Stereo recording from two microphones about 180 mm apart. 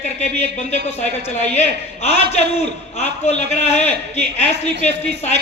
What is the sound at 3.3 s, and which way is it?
A man's voice, 40° left (ahead or behind).